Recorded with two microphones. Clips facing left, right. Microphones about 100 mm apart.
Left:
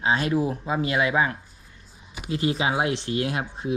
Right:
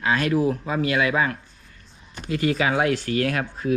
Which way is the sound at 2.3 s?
55° right (ahead or behind).